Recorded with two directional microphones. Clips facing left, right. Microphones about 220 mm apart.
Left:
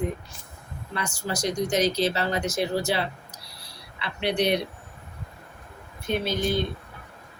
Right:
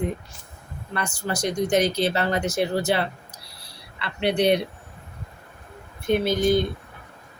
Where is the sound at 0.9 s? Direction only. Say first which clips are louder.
Right 2 dB; 60° right (ahead or behind).